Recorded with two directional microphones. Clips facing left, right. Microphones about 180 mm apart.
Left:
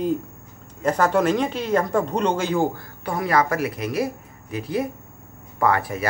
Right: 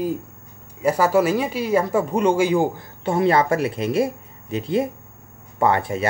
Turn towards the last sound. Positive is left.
turn(degrees=-25)  # may be behind; listen again after turning